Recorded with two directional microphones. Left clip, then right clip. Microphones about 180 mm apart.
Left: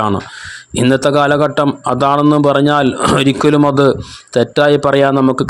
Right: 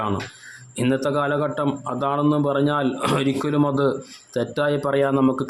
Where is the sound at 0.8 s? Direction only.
45° left (ahead or behind).